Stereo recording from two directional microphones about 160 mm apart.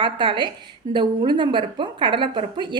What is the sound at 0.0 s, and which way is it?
A woman's voice, 30° right (ahead or behind).